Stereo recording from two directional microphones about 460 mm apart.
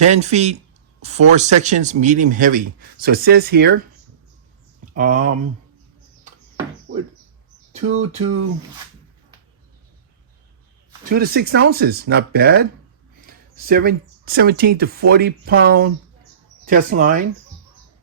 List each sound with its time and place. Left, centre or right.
0.0 s speech: centre
4.9 s speech: centre
6.9 s a sound: right
7.9 s speech: right
11.1 s speech: centre